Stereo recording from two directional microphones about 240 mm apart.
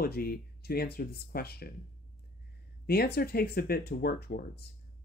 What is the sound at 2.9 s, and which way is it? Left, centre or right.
Speech, left.